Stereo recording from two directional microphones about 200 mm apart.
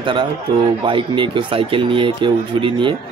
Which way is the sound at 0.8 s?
25° right (ahead or behind).